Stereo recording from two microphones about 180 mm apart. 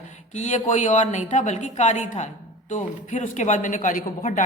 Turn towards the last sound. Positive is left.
turn(degrees=45)  # may be behind; listen again after turning